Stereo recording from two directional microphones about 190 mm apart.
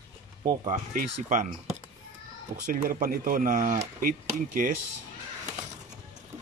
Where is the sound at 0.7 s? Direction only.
40° right (ahead or behind).